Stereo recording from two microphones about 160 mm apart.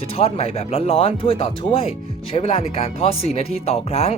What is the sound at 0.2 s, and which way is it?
Speech, 40° left (ahead or behind).